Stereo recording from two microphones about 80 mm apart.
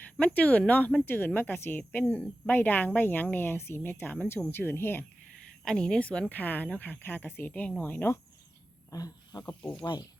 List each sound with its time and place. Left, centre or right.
0.2 s speech: centre
5.6 s speech: centre
8.9 s a sound: left
9.6 s speech: centre
9.8 s speech: left